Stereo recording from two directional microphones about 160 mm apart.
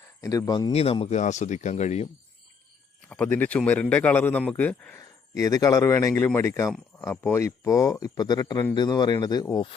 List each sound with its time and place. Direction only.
0.2 s speech: 20° left (ahead or behind)
0.7 s speech: 40° left (ahead or behind)
3.1 s speech: 10° left (ahead or behind)
4.9 s speech: 20° left (ahead or behind)